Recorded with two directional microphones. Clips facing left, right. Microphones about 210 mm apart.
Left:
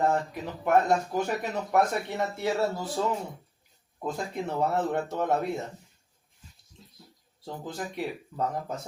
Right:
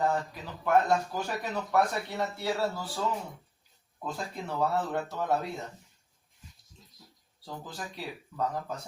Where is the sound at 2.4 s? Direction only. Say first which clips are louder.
Left 4 dB; 20° left (ahead or behind).